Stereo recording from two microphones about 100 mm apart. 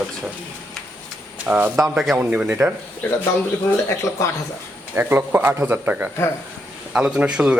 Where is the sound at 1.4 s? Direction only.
15° right (ahead or behind).